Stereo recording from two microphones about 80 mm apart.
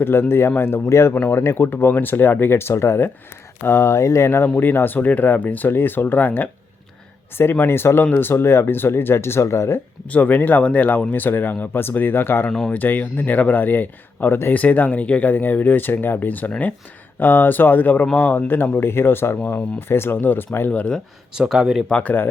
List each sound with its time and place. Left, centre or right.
0.0 s speech: left
10.1 s speech: centre
12.5 s speech: centre
12.7 s speech: left
21.3 s speech: centre
21.8 s speech: centre